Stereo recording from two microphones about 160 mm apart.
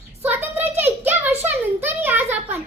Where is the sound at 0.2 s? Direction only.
15° right (ahead or behind).